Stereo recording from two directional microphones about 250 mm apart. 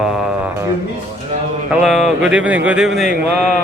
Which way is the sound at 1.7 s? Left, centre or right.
Centre.